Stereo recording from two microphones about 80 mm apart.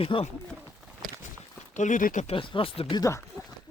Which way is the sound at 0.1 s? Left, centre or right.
Left.